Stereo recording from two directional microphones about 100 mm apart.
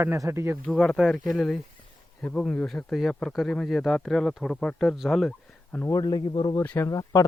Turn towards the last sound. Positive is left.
turn(degrees=35)  # may be behind; listen again after turning